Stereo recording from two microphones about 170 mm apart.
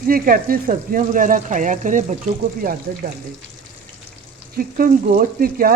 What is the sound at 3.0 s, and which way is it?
Frying, 60° right (ahead or behind).